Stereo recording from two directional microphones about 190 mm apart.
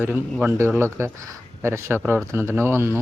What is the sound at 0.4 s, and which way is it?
Speech, 15° right (ahead or behind).